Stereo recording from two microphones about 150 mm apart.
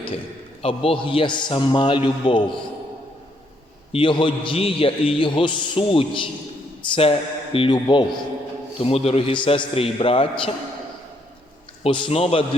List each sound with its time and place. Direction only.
0.6 s a man's voice: 40° left (ahead or behind)
3.9 s a man's voice: 35° left (ahead or behind)
11.8 s a man's voice: 35° left (ahead or behind)